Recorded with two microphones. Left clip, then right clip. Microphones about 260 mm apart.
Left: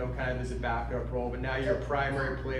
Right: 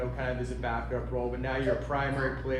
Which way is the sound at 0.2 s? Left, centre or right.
Right.